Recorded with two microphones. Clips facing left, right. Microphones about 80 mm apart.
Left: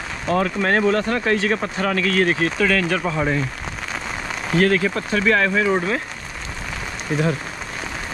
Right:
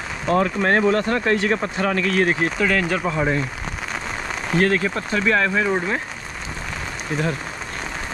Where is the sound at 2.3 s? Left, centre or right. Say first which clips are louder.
Left 1 dB; centre.